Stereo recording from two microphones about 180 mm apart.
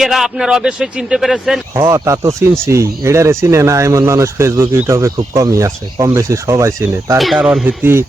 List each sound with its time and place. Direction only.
0.0 s a man's voice: centre (ahead or behind)
1.7 s speech: 15° right (ahead or behind)
7.2 s speech: 5° right (ahead or behind)